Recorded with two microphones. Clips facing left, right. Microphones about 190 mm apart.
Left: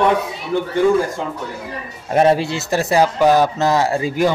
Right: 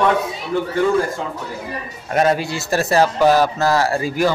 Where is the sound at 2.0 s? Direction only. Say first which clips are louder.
Left 3 dB; 25° left (ahead or behind).